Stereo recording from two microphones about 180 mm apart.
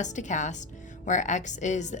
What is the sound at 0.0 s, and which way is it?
Speech, 40° left (ahead or behind).